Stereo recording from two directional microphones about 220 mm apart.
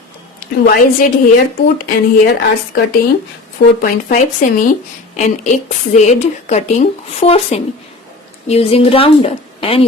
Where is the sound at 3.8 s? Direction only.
40° left (ahead or behind).